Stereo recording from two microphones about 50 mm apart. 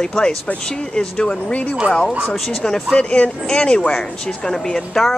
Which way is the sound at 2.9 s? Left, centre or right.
Left.